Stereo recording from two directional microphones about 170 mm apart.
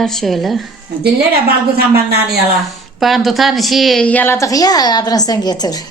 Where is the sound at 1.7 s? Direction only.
70° right (ahead or behind).